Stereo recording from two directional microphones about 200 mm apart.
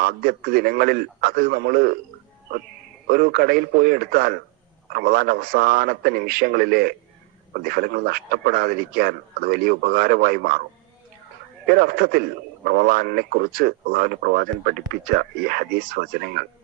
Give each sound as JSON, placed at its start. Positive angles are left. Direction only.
{"t": 0.0, "sound": "a man's voice", "side_deg": -50}
{"t": 3.1, "sound": "a man's voice", "side_deg": -50}
{"t": 11.6, "sound": "a man's voice", "side_deg": -50}